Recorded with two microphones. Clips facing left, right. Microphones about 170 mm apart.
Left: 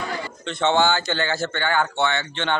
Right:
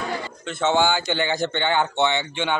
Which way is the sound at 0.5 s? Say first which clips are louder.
Left 1 dB; 5° right (ahead or behind).